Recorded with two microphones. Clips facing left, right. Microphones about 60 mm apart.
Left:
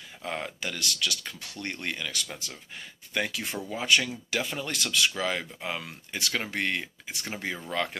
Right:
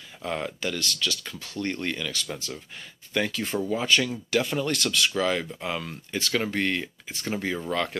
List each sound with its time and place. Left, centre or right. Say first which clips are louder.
0.2 s speech: right 4 dB; centre
4.3 s speech: right 8 dB; centre